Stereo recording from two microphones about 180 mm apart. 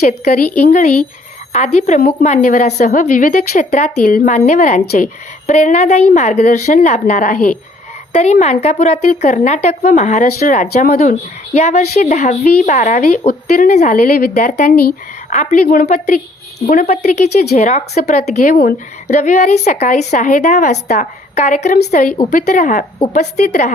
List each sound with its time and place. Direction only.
0.0 s a woman's voice: 40° left (ahead or behind)
4.0 s a woman's voice: 50° left (ahead or behind)
11.5 s a woman's voice: 40° left (ahead or behind); by 14.3 s 55° left (ahead or behind)
14.3 s a woman's voice: 45° left (ahead or behind)
15.3 s a woman's voice: 40° left (ahead or behind)
15.6 s a woman's voice: 50° left (ahead or behind)